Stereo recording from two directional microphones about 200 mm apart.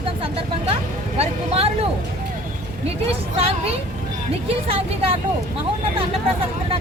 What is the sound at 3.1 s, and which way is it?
Speech, 30° right (ahead or behind).